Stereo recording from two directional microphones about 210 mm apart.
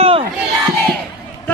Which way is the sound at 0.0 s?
25° right (ahead or behind).